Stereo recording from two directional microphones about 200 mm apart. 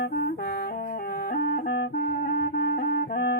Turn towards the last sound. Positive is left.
turn(degrees=50)  # may be behind; listen again after turning